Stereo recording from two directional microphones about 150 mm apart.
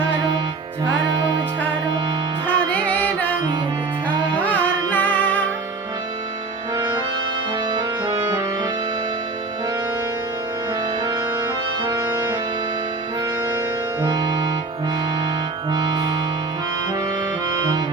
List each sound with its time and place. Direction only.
4.9 s music: 10° left (ahead or behind)
6.7 s music: 25° right (ahead or behind)
11.8 s music: 25° right (ahead or behind)
14.0 s music: 30° right (ahead or behind)
15.7 s music: 30° right (ahead or behind)